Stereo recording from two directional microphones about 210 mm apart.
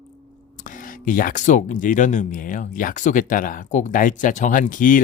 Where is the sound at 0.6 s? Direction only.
40° left (ahead or behind).